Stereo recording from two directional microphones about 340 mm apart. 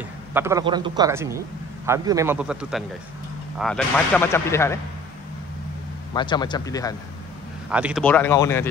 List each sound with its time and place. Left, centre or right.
0.3 s a man's voice: centre
6.1 s speech: centre
7.7 s speech: centre